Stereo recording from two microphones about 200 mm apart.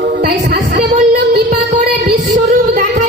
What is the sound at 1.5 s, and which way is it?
Music, 40° right (ahead or behind).